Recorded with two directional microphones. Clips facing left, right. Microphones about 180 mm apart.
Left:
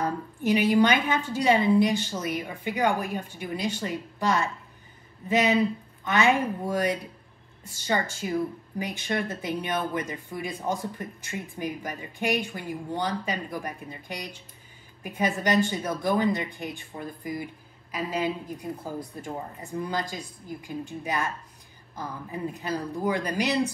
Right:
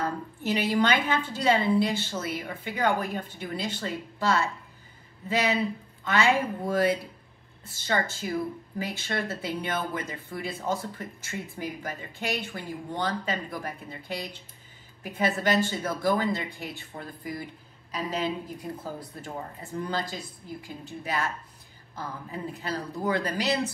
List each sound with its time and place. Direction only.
0.0 s a woman's voice: 15° left (ahead or behind)